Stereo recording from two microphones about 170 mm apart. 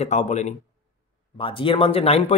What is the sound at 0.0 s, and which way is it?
Speech, 40° left (ahead or behind).